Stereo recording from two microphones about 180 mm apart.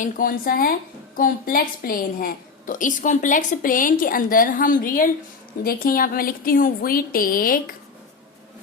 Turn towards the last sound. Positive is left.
turn(degrees=55)  # may be behind; listen again after turning